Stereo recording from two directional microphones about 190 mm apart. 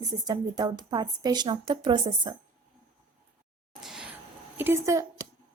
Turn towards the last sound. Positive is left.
turn(degrees=-15)  # may be behind; listen again after turning